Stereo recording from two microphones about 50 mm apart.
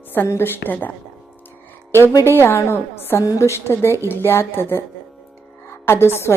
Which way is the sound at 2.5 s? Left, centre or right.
Left.